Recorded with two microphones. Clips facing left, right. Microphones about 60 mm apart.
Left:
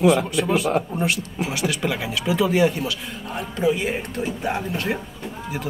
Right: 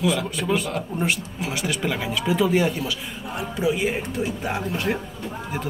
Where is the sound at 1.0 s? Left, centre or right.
Centre.